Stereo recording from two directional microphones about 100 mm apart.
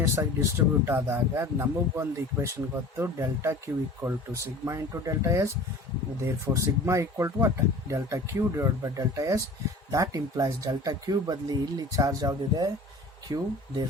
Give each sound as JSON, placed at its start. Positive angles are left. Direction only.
{"t": 0.0, "sound": "speech", "side_deg": -30}